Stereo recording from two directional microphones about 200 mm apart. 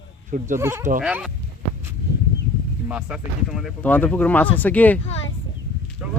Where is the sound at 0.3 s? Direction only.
40° right (ahead or behind).